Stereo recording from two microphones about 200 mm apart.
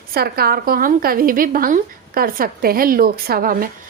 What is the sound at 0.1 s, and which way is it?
A woman's voice, 50° right (ahead or behind).